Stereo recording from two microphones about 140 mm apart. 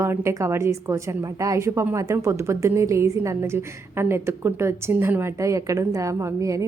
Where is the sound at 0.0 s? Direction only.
20° right (ahead or behind).